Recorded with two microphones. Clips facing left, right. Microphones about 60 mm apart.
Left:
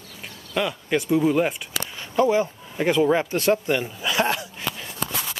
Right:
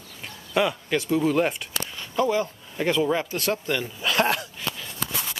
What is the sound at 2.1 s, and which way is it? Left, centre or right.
Speech, left.